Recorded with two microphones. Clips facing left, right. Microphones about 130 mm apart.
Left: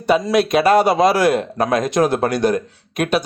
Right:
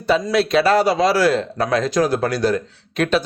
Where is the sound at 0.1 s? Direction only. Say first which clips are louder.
Left 2 dB; 15° left (ahead or behind).